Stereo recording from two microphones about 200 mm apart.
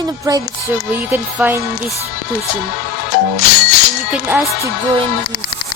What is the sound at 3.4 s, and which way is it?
Speech, 45° left (ahead or behind).